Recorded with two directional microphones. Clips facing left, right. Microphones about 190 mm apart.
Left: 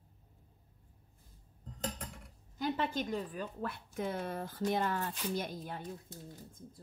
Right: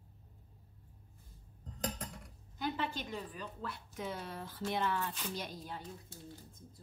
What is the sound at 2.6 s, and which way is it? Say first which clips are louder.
A woman's voice: left 4 dB; 45° left (ahead or behind).